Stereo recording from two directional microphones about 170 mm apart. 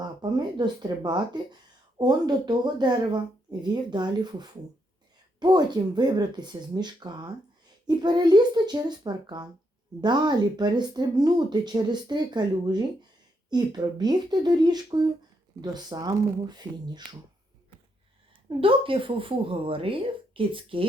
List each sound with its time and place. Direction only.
0.0 s speech: 25° right (ahead or behind)
18.4 s speech: 30° right (ahead or behind)